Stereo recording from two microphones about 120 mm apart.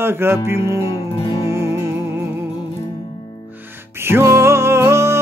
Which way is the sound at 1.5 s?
20° right (ahead or behind).